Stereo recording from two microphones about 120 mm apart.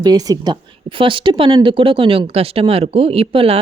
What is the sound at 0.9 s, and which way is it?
A woman's voice, 45° right (ahead or behind).